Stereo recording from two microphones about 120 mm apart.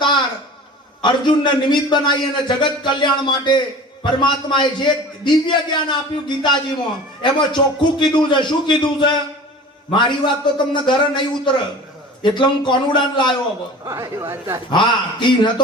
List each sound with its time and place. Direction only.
1.0 s a man's voice: 40° left (ahead or behind)
13.8 s speech: 25° right (ahead or behind)
14.7 s a man's voice: 40° left (ahead or behind)